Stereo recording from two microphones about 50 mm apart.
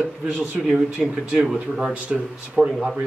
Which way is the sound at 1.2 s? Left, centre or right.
Centre.